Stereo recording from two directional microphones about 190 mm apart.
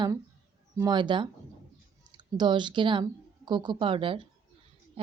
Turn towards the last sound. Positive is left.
turn(degrees=-30)  # may be behind; listen again after turning